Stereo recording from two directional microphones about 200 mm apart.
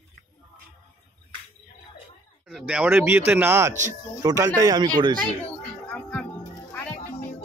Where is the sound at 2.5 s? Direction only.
5° right (ahead or behind); by 4.9 s 20° right (ahead or behind).